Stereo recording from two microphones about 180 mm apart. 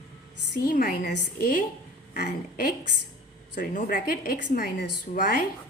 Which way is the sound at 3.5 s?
50° left (ahead or behind).